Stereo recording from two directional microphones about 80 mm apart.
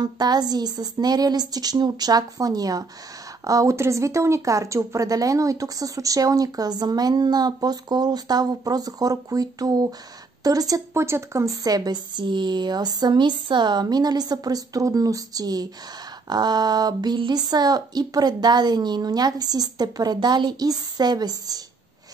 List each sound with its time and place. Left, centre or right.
0.0 s speech: right
10.9 s speech: right